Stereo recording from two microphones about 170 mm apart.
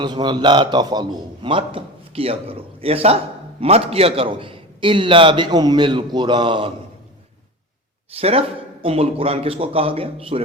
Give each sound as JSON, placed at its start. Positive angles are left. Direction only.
{"t": 0.0, "sound": "a man's voice", "side_deg": -25}
{"t": 8.1, "sound": "a man's voice", "side_deg": -35}